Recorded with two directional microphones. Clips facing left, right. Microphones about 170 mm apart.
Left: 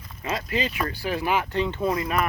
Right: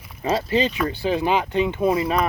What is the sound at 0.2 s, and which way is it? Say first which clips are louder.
Speech: right 7 dB; 30° right (ahead or behind).